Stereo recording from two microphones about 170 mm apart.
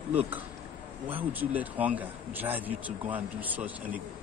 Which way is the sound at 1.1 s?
10° right (ahead or behind).